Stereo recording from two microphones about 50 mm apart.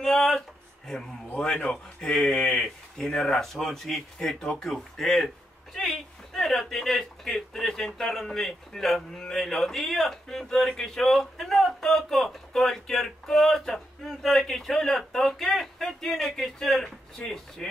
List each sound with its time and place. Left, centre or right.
0.0 s a sound: centre
0.9 s speech: centre
2.1 s speech: centre